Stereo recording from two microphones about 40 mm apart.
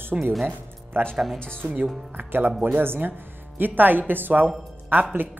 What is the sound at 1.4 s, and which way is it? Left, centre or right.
Speech, left.